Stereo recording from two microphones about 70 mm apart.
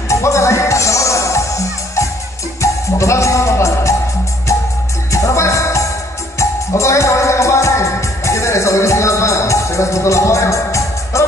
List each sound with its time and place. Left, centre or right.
0.1 s music: left
2.6 s music: left